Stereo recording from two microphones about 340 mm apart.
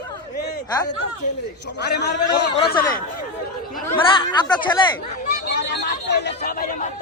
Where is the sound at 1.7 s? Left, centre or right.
Left.